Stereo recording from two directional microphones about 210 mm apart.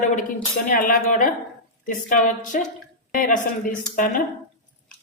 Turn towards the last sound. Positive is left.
turn(degrees=40)  # may be behind; listen again after turning